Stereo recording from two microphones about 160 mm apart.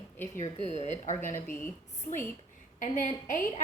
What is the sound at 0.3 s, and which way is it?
A woman's voice, 45° left (ahead or behind).